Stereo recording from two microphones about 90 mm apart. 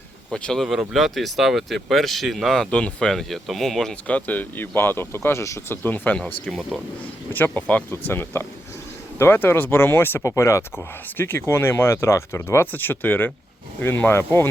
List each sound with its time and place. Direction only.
0.3 s speech: 10° left (ahead or behind)
4.0 s speech: 15° left (ahead or behind)
6.6 s speech: 5° right (ahead or behind)
7.3 s speech: 20° left (ahead or behind)